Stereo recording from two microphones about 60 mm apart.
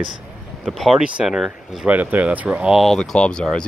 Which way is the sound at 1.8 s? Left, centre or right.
Right.